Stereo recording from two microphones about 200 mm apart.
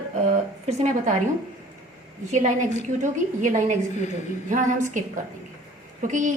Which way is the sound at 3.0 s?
40° right (ahead or behind).